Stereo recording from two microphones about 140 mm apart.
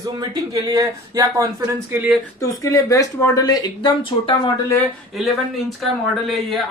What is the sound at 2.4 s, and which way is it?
Speech, 25° left (ahead or behind).